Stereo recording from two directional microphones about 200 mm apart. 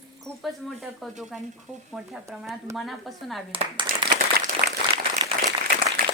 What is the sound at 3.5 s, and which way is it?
Speech, 25° right (ahead or behind).